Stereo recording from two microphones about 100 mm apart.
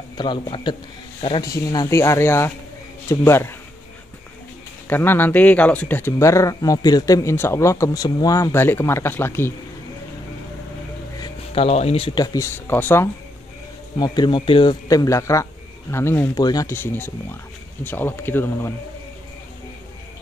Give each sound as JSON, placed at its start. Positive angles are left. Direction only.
{"t": 0.2, "sound": "speech", "side_deg": 50}
{"t": 1.4, "sound": "a man's voice", "side_deg": 40}
{"t": 1.9, "sound": "speech", "side_deg": 30}
{"t": 4.8, "sound": "speech", "side_deg": 20}
{"t": 11.5, "sound": "speech", "side_deg": 85}
{"t": 12.4, "sound": "speech", "side_deg": 20}
{"t": 13.9, "sound": "speech", "side_deg": 45}
{"t": 14.9, "sound": "a man's voice", "side_deg": 35}
{"t": 16.3, "sound": "a man's voice", "side_deg": 40}
{"t": 16.6, "sound": "speech", "side_deg": 20}